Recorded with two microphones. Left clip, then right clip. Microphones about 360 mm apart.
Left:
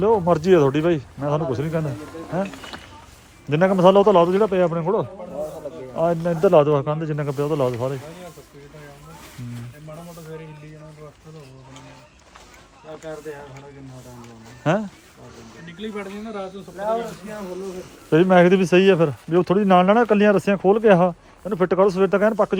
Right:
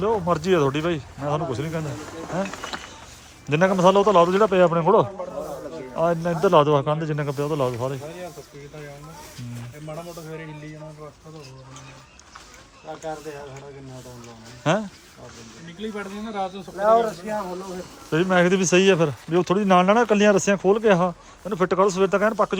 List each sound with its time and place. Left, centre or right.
0.0 s speech: centre
2.5 s speech: right
3.5 s speech: centre
14.6 s speech: centre
16.3 s speech: centre
16.8 s speech: right
18.1 s speech: centre